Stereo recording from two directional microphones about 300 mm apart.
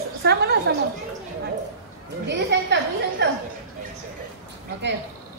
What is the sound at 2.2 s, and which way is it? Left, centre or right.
A woman's voice, right.